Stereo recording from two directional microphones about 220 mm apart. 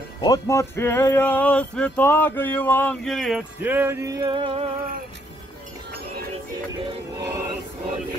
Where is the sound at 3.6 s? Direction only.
10° right (ahead or behind).